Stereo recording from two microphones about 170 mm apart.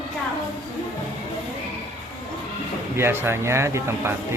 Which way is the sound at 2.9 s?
15° right (ahead or behind).